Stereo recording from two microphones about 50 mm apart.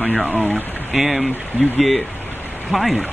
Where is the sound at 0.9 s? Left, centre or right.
Centre.